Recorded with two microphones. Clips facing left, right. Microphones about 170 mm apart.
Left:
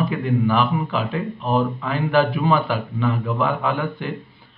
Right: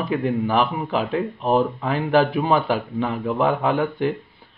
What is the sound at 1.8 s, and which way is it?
Speech, 50° right (ahead or behind).